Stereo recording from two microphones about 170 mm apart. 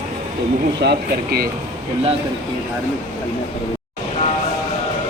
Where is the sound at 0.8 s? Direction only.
70° right (ahead or behind).